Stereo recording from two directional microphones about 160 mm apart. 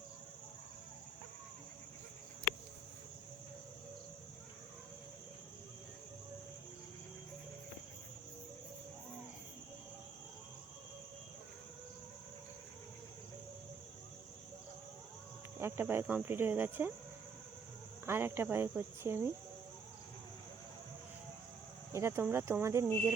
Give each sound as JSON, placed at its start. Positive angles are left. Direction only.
{"t": 15.5, "sound": "speech", "side_deg": -15}
{"t": 18.0, "sound": "speech", "side_deg": -15}
{"t": 21.9, "sound": "speech", "side_deg": -15}